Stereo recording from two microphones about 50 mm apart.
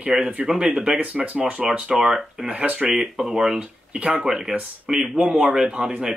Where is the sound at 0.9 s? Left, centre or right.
Right.